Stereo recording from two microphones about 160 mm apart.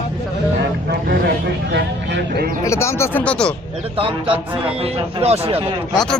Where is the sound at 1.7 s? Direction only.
90° right.